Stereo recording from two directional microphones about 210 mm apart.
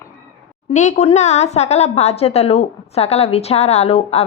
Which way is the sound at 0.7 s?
35° left (ahead or behind).